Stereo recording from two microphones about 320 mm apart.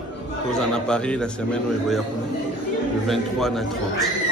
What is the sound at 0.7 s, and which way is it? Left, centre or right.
Speech, centre.